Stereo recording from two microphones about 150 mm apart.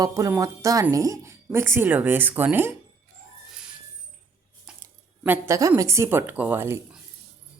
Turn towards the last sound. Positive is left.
turn(degrees=-15)  # may be behind; listen again after turning